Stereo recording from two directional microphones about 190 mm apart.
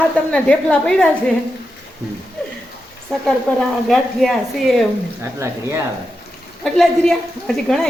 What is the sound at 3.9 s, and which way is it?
Speech, centre (ahead or behind).